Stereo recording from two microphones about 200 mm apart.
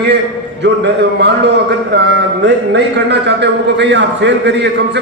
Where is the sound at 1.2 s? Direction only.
55° right (ahead or behind).